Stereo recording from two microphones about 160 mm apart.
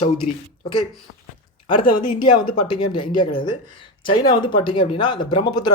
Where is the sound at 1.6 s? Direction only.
30° left (ahead or behind).